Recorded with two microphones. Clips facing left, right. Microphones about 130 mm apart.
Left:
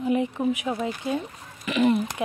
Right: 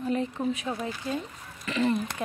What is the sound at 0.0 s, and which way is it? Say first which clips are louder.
Speech: left 4 dB; 15° left (ahead or behind).